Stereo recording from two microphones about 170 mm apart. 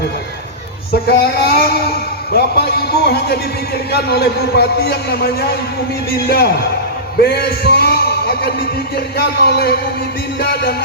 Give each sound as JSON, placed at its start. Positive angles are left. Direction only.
{"t": 1.2, "sound": "a man's voice", "side_deg": 70}
{"t": 7.2, "sound": "a sound", "side_deg": 65}
{"t": 9.1, "sound": "a man's voice", "side_deg": 70}